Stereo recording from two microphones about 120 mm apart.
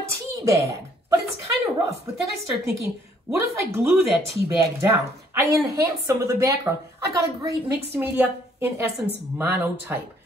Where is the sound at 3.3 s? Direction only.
25° right (ahead or behind).